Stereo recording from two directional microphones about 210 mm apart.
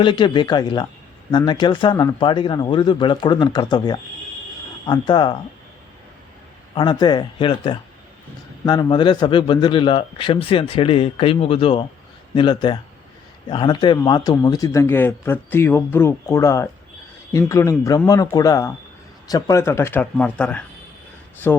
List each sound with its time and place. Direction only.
0.0 s speech: 20° left (ahead or behind)
6.7 s a man's voice: 20° left (ahead or behind)